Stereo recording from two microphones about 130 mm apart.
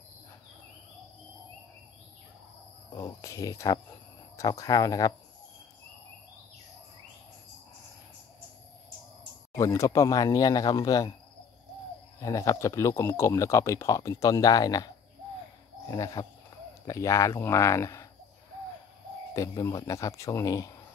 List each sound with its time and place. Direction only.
2.9 s speech: 25° left (ahead or behind)
9.5 s speech: 25° left (ahead or behind)
12.2 s speech: 25° left (ahead or behind)
15.9 s speech: 30° left (ahead or behind)
19.3 s speech: 25° left (ahead or behind)